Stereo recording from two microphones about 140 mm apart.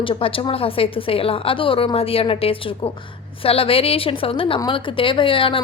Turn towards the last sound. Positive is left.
turn(degrees=40)  # may be behind; listen again after turning